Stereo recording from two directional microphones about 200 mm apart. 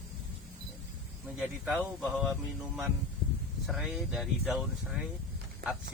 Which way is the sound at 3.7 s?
Centre (ahead or behind).